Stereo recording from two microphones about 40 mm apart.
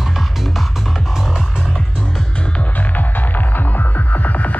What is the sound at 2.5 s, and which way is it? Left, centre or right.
Music, left.